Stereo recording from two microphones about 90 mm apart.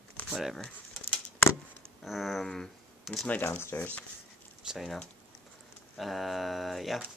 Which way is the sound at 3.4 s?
25° left (ahead or behind).